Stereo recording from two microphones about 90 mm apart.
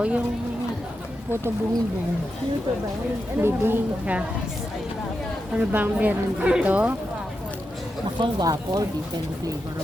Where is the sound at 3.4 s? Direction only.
25° right (ahead or behind).